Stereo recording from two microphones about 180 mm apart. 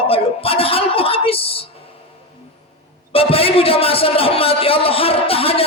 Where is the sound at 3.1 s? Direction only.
30° left (ahead or behind).